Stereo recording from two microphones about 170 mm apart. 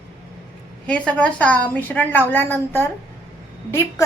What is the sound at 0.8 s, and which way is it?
A woman's voice, 5° left (ahead or behind).